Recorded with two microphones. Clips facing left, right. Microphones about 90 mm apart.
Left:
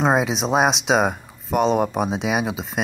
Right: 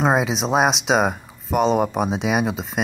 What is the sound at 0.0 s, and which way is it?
Speech, centre (ahead or behind).